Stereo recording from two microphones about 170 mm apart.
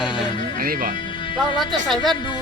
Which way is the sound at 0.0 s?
30° left (ahead or behind).